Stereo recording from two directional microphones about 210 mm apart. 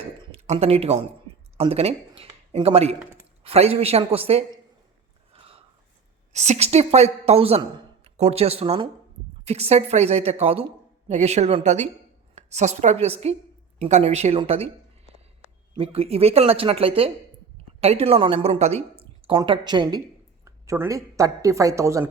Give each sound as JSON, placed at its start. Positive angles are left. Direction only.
{"t": 0.2, "sound": "speech", "side_deg": -30}
{"t": 5.3, "sound": "a sound", "side_deg": -25}
{"t": 6.3, "sound": "a woman's voice", "side_deg": -30}
{"t": 15.7, "sound": "speech", "side_deg": -25}